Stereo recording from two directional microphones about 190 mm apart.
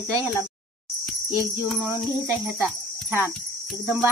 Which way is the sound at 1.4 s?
15° right (ahead or behind).